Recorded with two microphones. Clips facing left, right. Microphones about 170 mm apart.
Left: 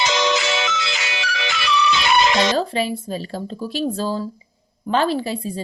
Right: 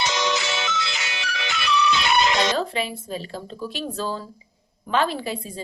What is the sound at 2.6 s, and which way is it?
A woman's voice, 35° left (ahead or behind).